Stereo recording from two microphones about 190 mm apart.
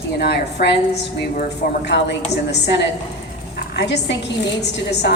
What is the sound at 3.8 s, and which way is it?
Speech, 65° left (ahead or behind).